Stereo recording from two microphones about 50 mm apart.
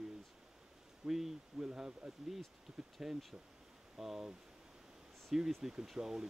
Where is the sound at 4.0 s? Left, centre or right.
Centre.